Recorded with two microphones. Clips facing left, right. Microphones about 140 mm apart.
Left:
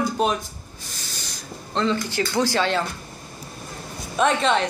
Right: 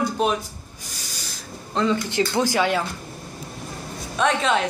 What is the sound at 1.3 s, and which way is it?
Spray, 10° right (ahead or behind).